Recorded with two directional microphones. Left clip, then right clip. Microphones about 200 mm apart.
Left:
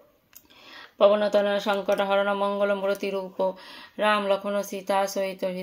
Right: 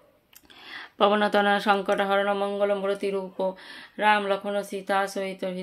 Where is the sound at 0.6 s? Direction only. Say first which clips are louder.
Left 2 dB; 20° right (ahead or behind).